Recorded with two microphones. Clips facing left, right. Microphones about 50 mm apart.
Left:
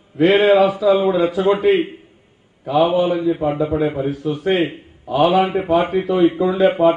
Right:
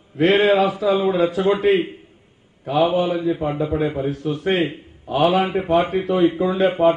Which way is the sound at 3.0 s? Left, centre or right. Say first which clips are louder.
Left 3 dB; left.